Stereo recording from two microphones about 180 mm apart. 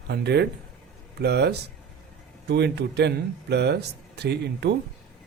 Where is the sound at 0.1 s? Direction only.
65° right (ahead or behind).